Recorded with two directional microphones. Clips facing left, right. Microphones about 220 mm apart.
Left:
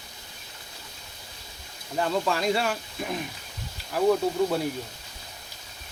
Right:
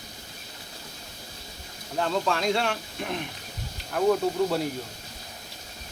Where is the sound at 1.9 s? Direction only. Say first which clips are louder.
Even; 5° left (ahead or behind).